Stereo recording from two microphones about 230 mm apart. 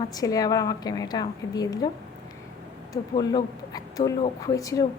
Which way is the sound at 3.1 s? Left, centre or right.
Centre.